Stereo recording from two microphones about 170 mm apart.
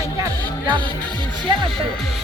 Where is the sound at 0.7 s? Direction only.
30° right (ahead or behind).